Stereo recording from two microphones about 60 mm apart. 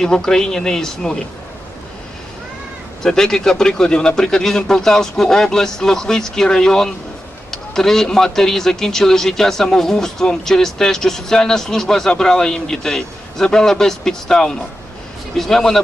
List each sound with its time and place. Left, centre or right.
0.0 s speech: centre
3.0 s a man's voice: centre